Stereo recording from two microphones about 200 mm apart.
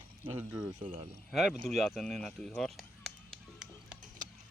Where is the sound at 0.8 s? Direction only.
30° right (ahead or behind).